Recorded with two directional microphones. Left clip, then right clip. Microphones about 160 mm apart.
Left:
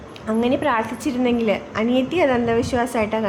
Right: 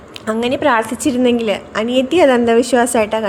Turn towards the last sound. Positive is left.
turn(degrees=-45)  # may be behind; listen again after turning